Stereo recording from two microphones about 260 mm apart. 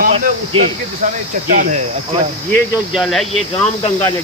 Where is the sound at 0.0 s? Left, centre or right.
Right.